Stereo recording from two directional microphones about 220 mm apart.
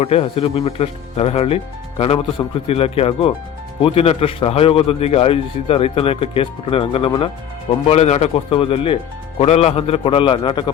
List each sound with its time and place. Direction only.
0.0 s speech: 25° left (ahead or behind)